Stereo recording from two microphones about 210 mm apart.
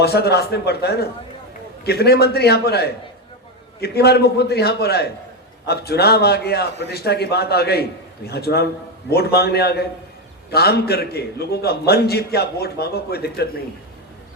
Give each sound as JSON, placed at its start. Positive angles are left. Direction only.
{"t": 0.0, "sound": "a man's voice", "side_deg": 50}